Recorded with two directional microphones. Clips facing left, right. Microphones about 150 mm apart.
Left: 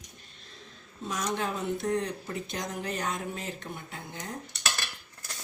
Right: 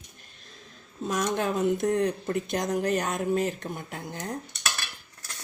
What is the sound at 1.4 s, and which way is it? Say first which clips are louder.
Speech: right 6 dB; 45° right (ahead or behind).